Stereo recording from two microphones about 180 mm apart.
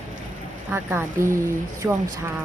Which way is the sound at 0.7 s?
15° right (ahead or behind).